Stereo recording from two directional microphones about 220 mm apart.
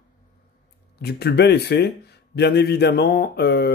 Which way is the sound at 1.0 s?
45° left (ahead or behind).